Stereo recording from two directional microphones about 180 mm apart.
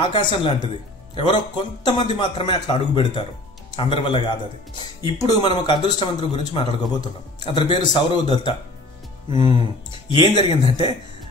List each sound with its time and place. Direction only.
0.0 s speech: 25° left (ahead or behind)